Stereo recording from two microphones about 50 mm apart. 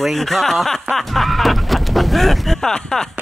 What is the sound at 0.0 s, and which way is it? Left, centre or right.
Speech, centre.